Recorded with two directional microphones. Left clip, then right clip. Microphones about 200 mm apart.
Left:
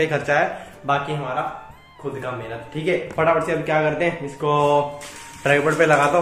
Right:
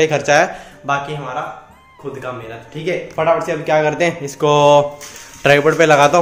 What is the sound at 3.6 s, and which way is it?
A man's voice, 50° right (ahead or behind).